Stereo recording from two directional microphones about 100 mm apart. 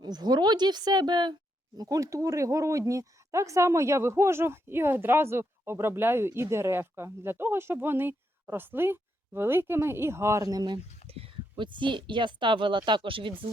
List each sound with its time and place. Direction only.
0.0 s speech: 45° right (ahead or behind)
1.8 s speech: 35° right (ahead or behind)
11.1 s a sound: 75° right (ahead or behind)
11.5 s speech: 55° right (ahead or behind)